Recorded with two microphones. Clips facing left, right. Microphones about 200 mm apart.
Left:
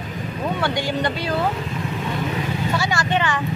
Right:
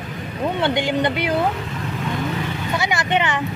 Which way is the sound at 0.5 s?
20° right (ahead or behind).